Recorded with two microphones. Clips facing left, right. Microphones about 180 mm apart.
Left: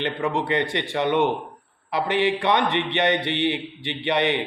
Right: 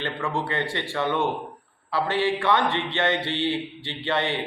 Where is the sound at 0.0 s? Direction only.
20° left (ahead or behind).